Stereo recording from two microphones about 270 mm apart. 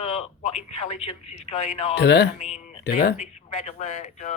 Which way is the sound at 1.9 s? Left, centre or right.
Left.